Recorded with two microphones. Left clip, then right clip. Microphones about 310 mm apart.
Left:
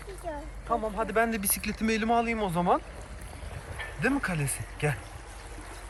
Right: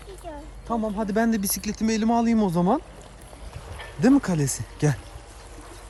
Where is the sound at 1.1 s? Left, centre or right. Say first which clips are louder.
Right 2 dB; centre.